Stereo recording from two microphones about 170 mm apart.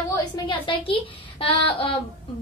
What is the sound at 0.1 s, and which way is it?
A woman's voice, 25° left (ahead or behind).